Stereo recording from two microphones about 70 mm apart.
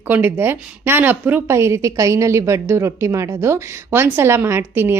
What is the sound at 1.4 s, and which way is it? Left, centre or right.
A woman's voice, right.